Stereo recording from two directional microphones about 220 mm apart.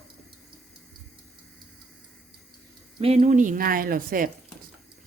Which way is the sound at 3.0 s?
30° right (ahead or behind).